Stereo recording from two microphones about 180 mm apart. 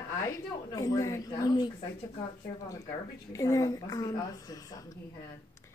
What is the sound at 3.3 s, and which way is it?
A woman's voice, 20° left (ahead or behind).